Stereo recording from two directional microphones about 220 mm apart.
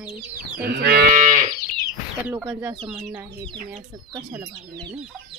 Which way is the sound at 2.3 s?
10° right (ahead or behind).